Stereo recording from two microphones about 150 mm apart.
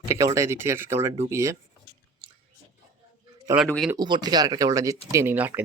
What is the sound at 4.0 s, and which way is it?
Speech, 30° right (ahead or behind).